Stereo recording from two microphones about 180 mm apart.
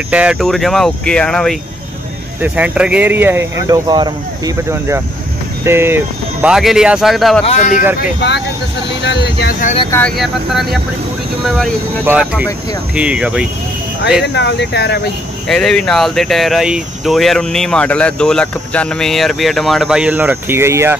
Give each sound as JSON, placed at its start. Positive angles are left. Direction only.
{"t": 0.1, "sound": "speech", "side_deg": -5}
{"t": 2.4, "sound": "speech", "side_deg": -10}
{"t": 7.4, "sound": "speech", "side_deg": 40}
{"t": 9.0, "sound": "speech", "side_deg": 70}
{"t": 9.5, "sound": "speech", "side_deg": 45}
{"t": 9.8, "sound": "speech", "side_deg": 10}
{"t": 10.1, "sound": "speech", "side_deg": 0}
{"t": 12.0, "sound": "speech", "side_deg": -10}
{"t": 14.2, "sound": "speech", "side_deg": 70}
{"t": 15.4, "sound": "speech", "side_deg": 5}